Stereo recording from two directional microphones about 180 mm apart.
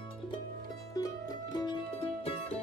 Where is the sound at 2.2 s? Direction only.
35° left (ahead or behind).